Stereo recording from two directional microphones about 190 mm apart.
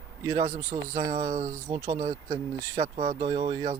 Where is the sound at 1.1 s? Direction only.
40° right (ahead or behind).